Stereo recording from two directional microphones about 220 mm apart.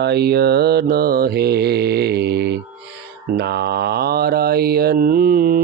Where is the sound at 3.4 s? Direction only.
50° right (ahead or behind).